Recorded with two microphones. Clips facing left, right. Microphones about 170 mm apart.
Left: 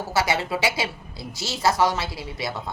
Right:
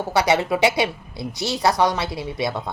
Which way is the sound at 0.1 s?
20° right (ahead or behind).